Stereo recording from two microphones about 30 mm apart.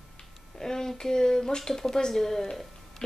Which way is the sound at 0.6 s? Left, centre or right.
Centre.